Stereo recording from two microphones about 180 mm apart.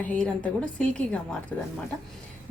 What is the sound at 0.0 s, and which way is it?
A woman's voice, 10° left (ahead or behind).